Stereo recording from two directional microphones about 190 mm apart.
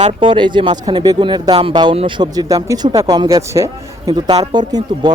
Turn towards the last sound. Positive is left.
turn(degrees=-25)  # may be behind; listen again after turning